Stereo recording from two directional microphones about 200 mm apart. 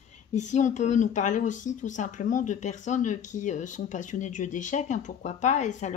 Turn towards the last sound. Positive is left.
turn(degrees=35)  # may be behind; listen again after turning